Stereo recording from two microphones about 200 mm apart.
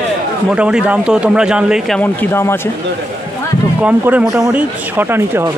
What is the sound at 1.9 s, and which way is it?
Speech, 10° left (ahead or behind).